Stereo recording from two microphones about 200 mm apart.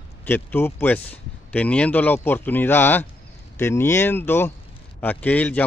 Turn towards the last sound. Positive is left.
turn(degrees=5)  # may be behind; listen again after turning